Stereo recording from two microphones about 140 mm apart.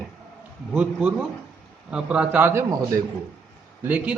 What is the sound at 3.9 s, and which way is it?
Speech, 10° right (ahead or behind).